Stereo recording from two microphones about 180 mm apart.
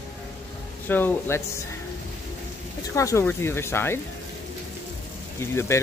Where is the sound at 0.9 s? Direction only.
10° left (ahead or behind).